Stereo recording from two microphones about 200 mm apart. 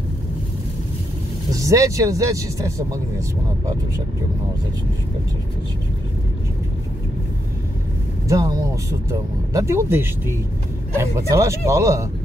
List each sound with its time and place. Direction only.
1.5 s speech: 15° right (ahead or behind)
8.3 s speech: 15° right (ahead or behind)